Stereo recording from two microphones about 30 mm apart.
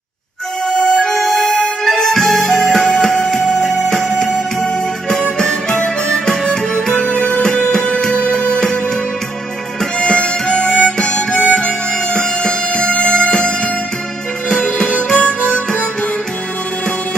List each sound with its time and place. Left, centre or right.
0.7 s music: centre
5.4 s music: centre; by 8.6 s left
9.9 s harmonica: left
12.1 s music: centre
12.7 s music: left
15.0 s harmonica: left